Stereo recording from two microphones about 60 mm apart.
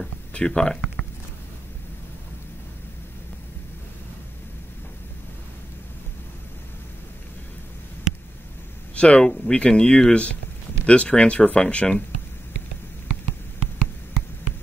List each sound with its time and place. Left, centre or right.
0.3 s speech: centre
8.9 s speech: centre